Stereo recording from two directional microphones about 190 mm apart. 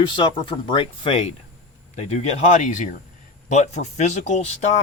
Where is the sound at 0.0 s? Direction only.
25° left (ahead or behind).